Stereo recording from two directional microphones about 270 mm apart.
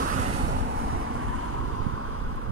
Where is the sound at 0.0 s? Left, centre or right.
Right.